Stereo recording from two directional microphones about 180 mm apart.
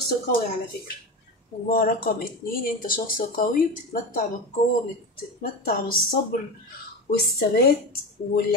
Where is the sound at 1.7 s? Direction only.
55° left (ahead or behind).